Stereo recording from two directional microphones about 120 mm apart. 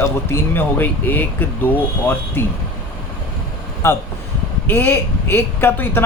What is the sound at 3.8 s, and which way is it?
Speech, 25° left (ahead or behind).